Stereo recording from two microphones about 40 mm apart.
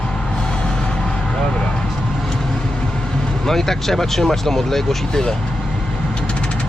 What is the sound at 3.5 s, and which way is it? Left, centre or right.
Speech, centre.